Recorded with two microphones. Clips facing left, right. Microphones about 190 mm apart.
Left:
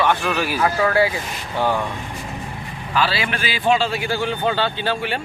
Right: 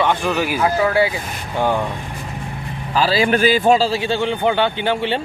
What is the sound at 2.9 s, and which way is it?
Speech, 40° right (ahead or behind).